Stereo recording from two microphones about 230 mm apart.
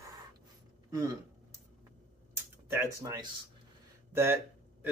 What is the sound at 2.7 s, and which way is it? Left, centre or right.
Speech, centre.